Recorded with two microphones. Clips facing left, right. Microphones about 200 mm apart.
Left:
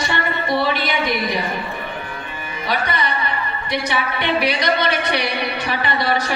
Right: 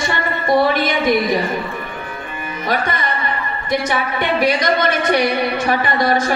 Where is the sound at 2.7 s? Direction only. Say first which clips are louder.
Right 2 dB; 45° right (ahead or behind).